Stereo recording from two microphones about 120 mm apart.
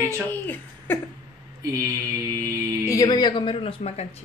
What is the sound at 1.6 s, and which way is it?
Speech, 30° right (ahead or behind).